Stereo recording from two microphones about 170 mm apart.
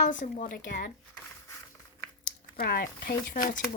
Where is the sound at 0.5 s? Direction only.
70° left (ahead or behind).